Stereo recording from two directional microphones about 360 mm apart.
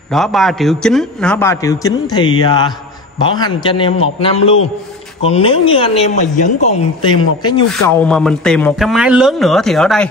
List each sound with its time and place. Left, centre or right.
0.1 s a man's voice: centre